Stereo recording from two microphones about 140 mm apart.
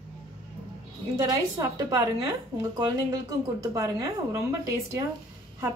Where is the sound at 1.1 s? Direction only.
25° right (ahead or behind).